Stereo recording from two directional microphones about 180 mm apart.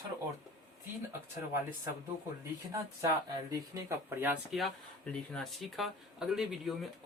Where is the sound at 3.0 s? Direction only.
20° right (ahead or behind).